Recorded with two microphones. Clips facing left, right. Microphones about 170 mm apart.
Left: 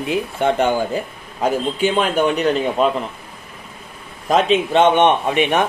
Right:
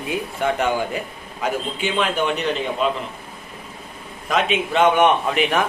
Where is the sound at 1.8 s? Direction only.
45° left (ahead or behind).